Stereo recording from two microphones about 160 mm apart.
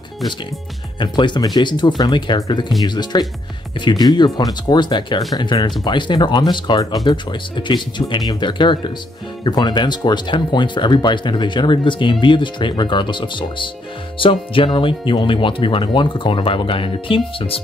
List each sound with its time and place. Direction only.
0.9 s speech: 30° left (ahead or behind)